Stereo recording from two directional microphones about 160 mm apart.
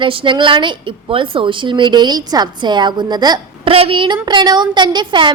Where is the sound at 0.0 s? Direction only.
30° right (ahead or behind).